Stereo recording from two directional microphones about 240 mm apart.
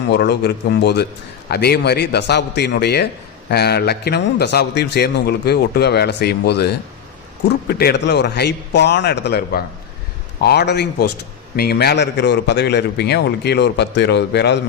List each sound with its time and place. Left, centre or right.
0.1 s a man's voice: left